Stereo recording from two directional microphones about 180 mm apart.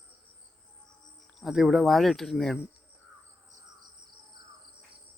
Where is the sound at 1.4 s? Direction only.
Centre (ahead or behind).